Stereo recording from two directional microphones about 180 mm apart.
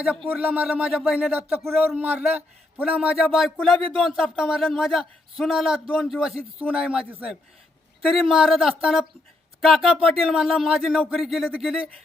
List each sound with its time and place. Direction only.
0.0 s speech: 5° right (ahead or behind)
8.1 s speech: centre (ahead or behind)